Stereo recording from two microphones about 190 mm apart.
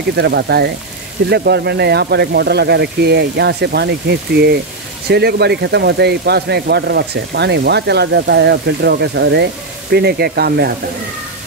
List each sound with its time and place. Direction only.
0.1 s speech: 60° right (ahead or behind)